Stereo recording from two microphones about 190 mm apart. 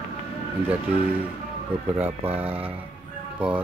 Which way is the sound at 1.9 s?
10° right (ahead or behind).